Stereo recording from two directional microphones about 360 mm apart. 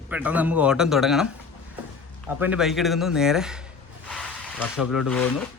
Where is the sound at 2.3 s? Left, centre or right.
Centre.